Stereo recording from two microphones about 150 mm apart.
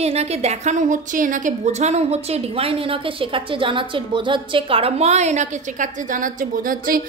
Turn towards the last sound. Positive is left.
turn(degrees=-70)  # may be behind; listen again after turning